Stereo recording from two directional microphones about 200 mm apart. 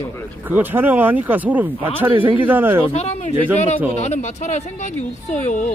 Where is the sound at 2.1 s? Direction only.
25° right (ahead or behind).